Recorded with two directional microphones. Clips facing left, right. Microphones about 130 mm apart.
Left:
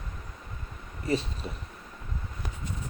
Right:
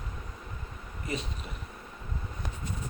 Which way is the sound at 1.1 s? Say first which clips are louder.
Left 7 dB; 30° left (ahead or behind).